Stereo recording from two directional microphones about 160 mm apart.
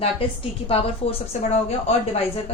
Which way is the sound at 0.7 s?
40° left (ahead or behind).